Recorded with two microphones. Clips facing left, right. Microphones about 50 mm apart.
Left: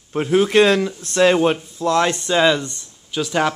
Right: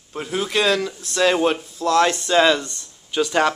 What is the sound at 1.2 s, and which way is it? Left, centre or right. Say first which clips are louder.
Speech: left 3 dB; centre.